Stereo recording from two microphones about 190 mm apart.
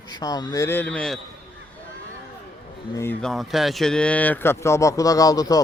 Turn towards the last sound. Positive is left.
turn(degrees=20)  # may be behind; listen again after turning